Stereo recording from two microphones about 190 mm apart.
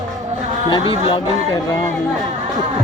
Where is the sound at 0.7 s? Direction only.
25° left (ahead or behind).